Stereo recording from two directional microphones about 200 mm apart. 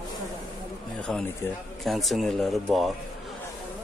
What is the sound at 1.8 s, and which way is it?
Speech, centre (ahead or behind).